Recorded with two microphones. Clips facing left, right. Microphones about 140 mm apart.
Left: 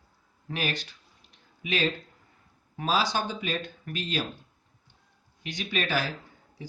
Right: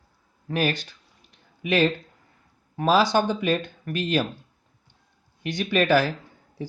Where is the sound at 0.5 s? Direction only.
50° right (ahead or behind).